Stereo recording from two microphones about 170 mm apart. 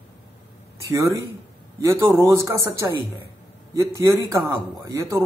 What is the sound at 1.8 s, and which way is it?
Speech, 20° right (ahead or behind).